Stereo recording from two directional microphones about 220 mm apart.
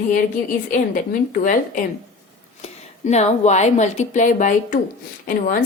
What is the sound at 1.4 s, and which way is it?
Speech, 35° left (ahead or behind).